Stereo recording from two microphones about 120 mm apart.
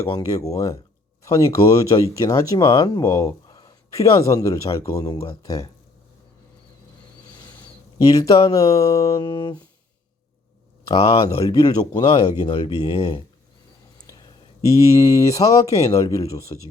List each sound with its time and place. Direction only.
0.0 s speech: 30° left (ahead or behind)
8.0 s speech: 30° left (ahead or behind)
8.3 s speech: 45° left (ahead or behind)
8.9 s speech: 30° left (ahead or behind)
10.8 s speech: 45° left (ahead or behind)
11.3 s speech: 35° left (ahead or behind)
12.0 s speech: 50° left (ahead or behind)
12.8 s speech: 55° left (ahead or behind)
14.7 s speech: 30° left (ahead or behind)
15.7 s speech: 55° left (ahead or behind)
16.0 s speech: 30° left (ahead or behind)